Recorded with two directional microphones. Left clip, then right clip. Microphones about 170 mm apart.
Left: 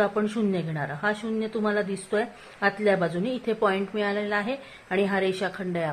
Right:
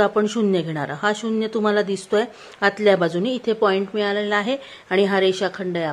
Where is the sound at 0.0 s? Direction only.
35° right (ahead or behind).